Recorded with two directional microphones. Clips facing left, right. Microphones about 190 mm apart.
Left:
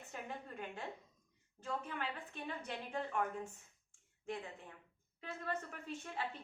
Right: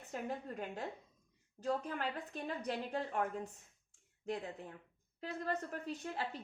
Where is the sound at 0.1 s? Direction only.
40° right (ahead or behind).